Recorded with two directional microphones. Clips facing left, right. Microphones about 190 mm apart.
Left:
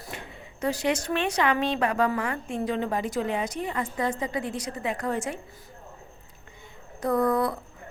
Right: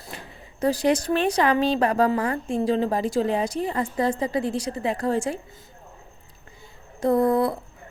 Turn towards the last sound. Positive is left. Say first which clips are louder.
# right 4 dB
turn(degrees=-25)  # may be behind; listen again after turning